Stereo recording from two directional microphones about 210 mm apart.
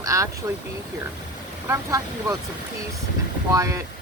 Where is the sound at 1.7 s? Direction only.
15° right (ahead or behind).